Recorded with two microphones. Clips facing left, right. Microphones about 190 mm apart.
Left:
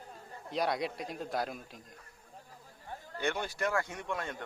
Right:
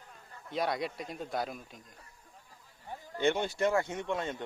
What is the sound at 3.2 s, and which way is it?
Speech, 25° right (ahead or behind).